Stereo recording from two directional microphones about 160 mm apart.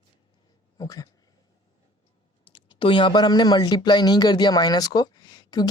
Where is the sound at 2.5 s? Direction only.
30° left (ahead or behind).